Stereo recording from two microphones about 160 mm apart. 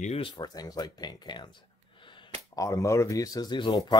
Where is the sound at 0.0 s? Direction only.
40° left (ahead or behind).